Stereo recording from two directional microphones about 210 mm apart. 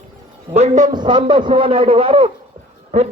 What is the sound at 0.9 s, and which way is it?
A man's voice, 20° right (ahead or behind).